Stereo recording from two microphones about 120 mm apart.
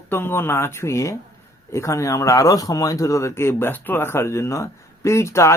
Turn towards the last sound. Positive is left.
turn(degrees=25)  # may be behind; listen again after turning